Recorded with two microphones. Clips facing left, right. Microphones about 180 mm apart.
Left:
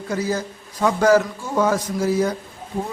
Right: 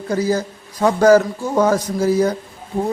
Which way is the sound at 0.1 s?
35° right (ahead or behind).